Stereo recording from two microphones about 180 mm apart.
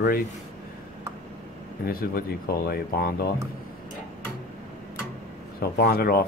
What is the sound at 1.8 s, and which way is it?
Speech, 55° left (ahead or behind).